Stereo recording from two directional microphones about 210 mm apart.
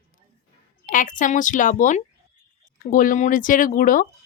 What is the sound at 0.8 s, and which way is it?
Speech, 40° left (ahead or behind).